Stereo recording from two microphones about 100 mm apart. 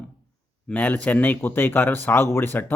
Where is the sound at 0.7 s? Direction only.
15° left (ahead or behind).